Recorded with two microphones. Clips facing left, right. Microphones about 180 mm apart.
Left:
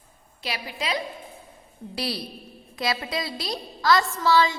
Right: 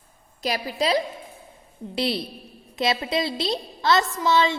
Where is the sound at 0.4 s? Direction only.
40° right (ahead or behind).